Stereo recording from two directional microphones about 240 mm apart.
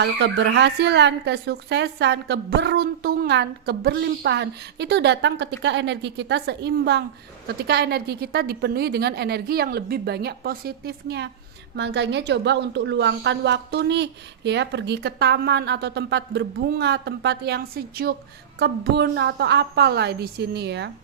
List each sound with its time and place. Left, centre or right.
0.0 s a woman's voice: right